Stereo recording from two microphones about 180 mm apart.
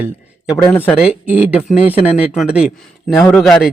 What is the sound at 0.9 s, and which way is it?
A man's voice, 10° right (ahead or behind).